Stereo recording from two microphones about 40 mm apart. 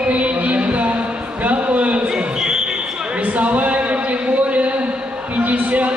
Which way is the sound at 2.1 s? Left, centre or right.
Centre.